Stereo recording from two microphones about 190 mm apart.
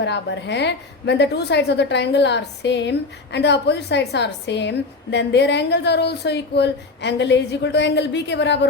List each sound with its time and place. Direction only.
0.0 s a woman's voice: 65° left (ahead or behind)